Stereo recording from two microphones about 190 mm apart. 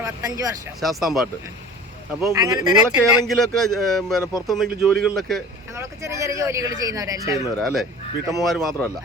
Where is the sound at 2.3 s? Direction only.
20° right (ahead or behind).